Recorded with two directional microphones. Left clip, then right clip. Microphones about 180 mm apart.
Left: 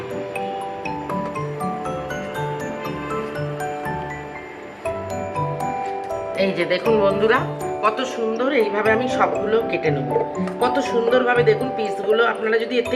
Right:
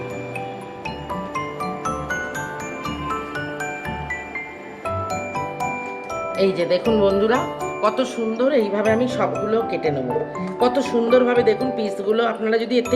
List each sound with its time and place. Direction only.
6.4 s speech: 45° right (ahead or behind)
7.8 s speech: 55° right (ahead or behind)